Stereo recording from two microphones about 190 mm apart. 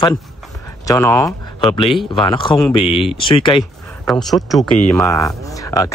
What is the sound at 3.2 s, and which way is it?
Speech, 25° left (ahead or behind).